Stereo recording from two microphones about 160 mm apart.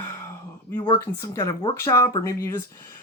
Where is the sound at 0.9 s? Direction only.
20° left (ahead or behind).